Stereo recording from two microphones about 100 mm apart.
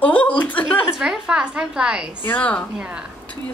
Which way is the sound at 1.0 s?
10° right (ahead or behind).